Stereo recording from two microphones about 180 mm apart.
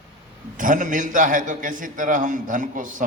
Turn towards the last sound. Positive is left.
turn(degrees=-45)  # may be behind; listen again after turning